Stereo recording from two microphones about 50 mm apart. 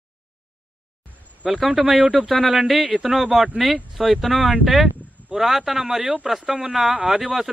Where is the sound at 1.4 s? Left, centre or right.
Centre.